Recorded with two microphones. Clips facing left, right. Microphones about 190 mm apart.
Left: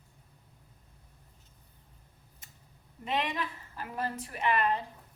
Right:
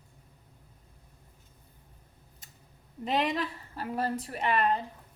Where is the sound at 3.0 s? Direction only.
35° right (ahead or behind).